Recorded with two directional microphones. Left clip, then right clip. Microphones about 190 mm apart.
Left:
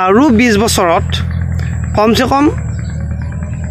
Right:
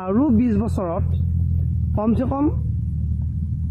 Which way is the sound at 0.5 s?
20° left (ahead or behind).